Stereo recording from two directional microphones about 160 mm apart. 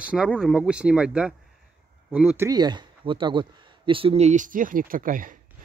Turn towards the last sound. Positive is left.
turn(degrees=-60)  # may be behind; listen again after turning